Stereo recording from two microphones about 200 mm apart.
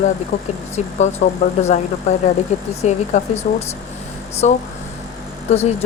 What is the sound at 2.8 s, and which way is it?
Speech, 35° left (ahead or behind).